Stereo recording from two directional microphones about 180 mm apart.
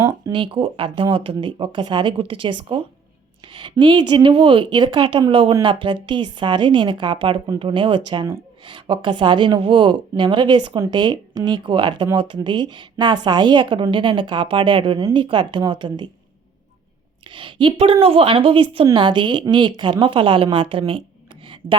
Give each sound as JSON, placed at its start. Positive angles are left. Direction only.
{"t": 0.1, "sound": "speech", "side_deg": -30}
{"t": 17.3, "sound": "a woman's voice", "side_deg": -30}
{"t": 21.4, "sound": "tick", "side_deg": -30}